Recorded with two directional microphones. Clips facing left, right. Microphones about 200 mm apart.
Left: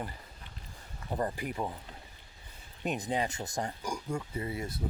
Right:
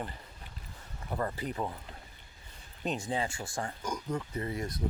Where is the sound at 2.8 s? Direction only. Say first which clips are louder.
Left 1 dB; 15° left (ahead or behind).